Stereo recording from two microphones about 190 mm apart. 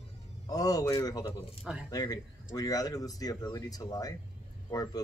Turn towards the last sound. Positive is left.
turn(degrees=20)  # may be behind; listen again after turning